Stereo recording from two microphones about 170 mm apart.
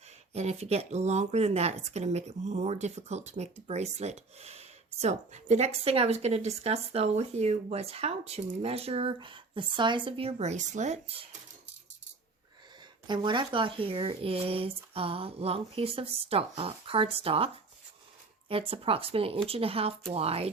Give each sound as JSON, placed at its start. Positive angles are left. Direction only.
{"t": 0.3, "sound": "speech", "side_deg": -40}
{"t": 13.1, "sound": "speech", "side_deg": -30}